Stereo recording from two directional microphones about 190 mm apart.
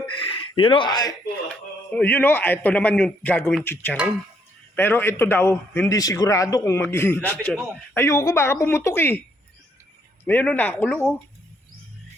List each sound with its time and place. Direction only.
0.5 s speech: 25° left (ahead or behind)
1.5 s a man's voice: 10° left (ahead or behind)
7.9 s a man's voice: 15° left (ahead or behind)
10.2 s a man's voice: 10° left (ahead or behind)